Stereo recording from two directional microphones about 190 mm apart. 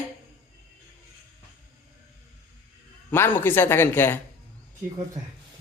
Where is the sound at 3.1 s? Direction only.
10° left (ahead or behind).